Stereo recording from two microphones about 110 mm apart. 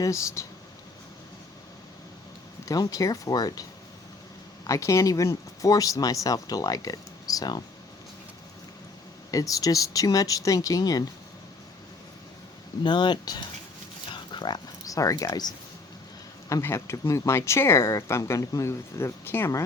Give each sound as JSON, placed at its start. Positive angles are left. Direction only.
{"t": 0.0, "sound": "speech", "side_deg": 30}
{"t": 2.6, "sound": "speech", "side_deg": 35}
{"t": 9.3, "sound": "speech", "side_deg": 30}
{"t": 12.8, "sound": "speech", "side_deg": 45}
{"t": 14.1, "sound": "a sound", "side_deg": 45}
{"t": 14.8, "sound": "speech", "side_deg": 30}
{"t": 16.5, "sound": "speech", "side_deg": 25}